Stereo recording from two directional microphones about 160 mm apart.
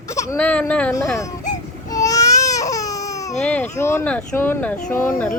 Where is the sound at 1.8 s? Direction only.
20° left (ahead or behind).